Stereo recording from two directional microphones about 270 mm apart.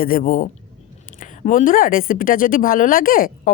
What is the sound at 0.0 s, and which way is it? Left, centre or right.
A woman's voice, left.